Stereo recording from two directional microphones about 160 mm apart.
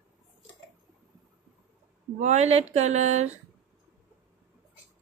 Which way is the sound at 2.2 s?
45° right (ahead or behind).